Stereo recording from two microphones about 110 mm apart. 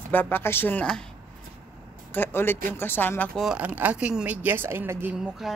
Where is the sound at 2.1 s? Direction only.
20° left (ahead or behind).